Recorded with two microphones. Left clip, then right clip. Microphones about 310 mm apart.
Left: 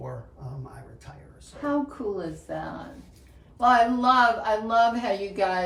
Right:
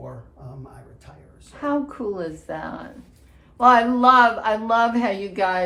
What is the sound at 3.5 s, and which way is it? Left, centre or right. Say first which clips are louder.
Speech: right 5 dB; centre.